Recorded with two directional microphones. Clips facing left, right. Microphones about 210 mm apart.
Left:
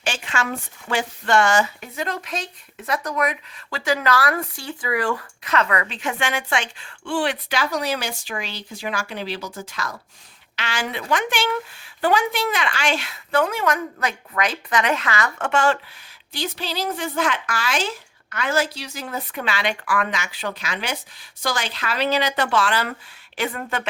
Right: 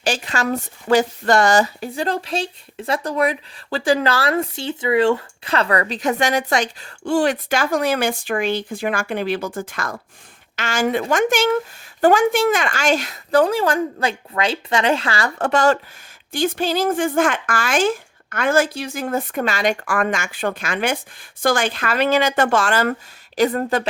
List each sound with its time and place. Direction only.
0.0 s speech: 35° right (ahead or behind)
16.3 s speech: 50° right (ahead or behind)